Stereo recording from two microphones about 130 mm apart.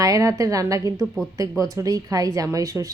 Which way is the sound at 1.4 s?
25° right (ahead or behind).